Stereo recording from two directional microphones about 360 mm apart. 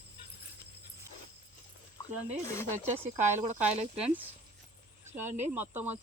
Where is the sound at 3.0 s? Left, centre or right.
Centre.